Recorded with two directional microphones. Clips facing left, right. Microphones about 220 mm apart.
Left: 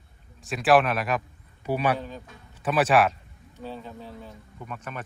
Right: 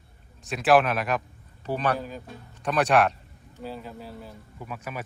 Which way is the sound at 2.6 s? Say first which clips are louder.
Left 1 dB; 5° left (ahead or behind).